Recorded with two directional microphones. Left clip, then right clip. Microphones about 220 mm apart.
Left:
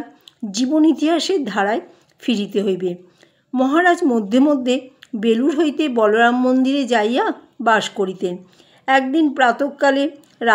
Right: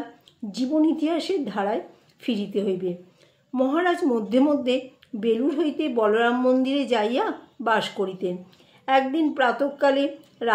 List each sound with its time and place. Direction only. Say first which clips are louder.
0.5 s speech: left 6 dB; 50° left (ahead or behind)